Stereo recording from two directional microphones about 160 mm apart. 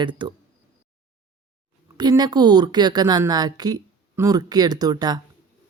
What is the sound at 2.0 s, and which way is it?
Speech, 25° right (ahead or behind).